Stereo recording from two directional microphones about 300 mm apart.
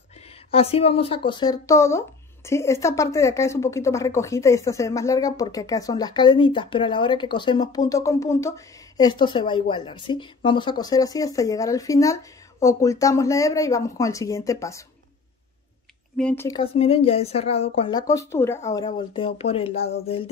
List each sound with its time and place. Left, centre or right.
0.5 s speech: centre
16.2 s speech: centre